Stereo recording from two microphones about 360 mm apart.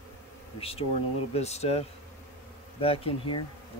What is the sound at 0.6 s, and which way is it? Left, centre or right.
Speech, centre.